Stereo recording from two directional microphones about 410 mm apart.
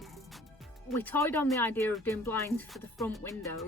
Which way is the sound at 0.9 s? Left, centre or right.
Centre.